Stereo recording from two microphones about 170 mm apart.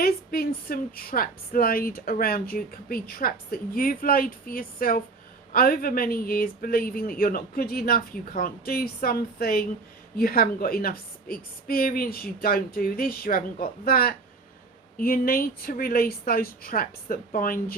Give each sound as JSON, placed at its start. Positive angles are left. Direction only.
{"t": 0.0, "sound": "a woman's voice", "side_deg": 60}